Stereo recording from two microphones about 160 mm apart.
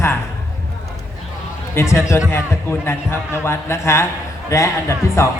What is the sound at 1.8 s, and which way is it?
A man's voice, 15° left (ahead or behind).